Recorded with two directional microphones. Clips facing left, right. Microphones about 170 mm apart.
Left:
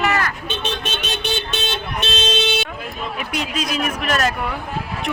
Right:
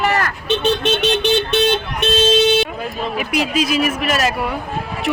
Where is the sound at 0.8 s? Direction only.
70° right (ahead or behind).